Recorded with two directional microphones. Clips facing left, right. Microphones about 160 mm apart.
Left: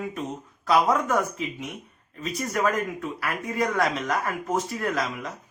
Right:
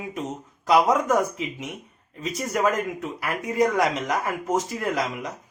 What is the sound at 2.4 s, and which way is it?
Speech, 20° right (ahead or behind).